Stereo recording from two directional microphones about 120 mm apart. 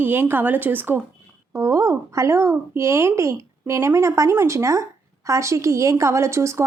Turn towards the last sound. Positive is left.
turn(degrees=-25)  # may be behind; listen again after turning